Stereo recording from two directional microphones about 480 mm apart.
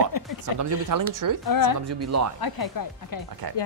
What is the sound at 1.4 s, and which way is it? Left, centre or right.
Speech, left.